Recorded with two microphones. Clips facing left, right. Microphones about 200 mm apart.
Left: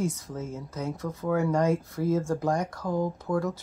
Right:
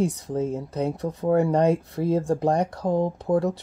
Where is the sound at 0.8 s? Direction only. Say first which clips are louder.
Right 5 dB; 35° right (ahead or behind).